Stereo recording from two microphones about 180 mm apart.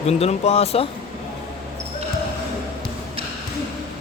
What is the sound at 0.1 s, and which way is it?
Speech, 35° left (ahead or behind).